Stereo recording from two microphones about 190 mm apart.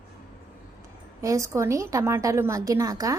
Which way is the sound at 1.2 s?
15° right (ahead or behind).